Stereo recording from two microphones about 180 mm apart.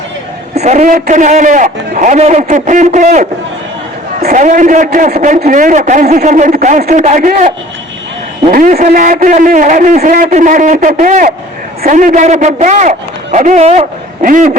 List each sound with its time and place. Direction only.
0.5 s a man's voice: 40° right (ahead or behind)
4.3 s a man's voice: 45° right (ahead or behind)